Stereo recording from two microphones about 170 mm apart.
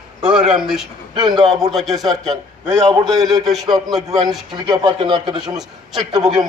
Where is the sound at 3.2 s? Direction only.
Centre (ahead or behind).